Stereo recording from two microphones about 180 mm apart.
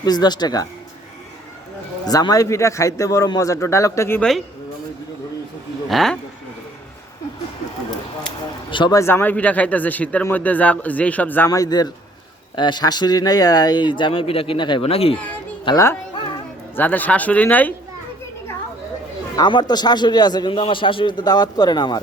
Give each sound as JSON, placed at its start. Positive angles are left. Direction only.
{"t": 0.0, "sound": "speech", "side_deg": 20}
{"t": 2.0, "sound": "a man's voice", "side_deg": 20}
{"t": 4.2, "sound": "speech", "side_deg": 0}
{"t": 5.9, "sound": "speech", "side_deg": 0}
{"t": 8.7, "sound": "a man's voice", "side_deg": 25}
{"t": 15.6, "sound": "a man's voice", "side_deg": 20}
{"t": 19.4, "sound": "speech", "side_deg": 25}